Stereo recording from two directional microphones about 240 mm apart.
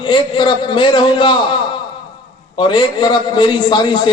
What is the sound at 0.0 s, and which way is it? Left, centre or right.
A man's voice, centre.